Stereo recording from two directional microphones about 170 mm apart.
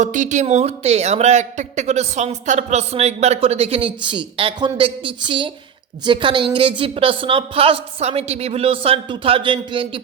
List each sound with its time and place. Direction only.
0.0 s a man's voice: 45° right (ahead or behind); by 10.0 s 30° right (ahead or behind)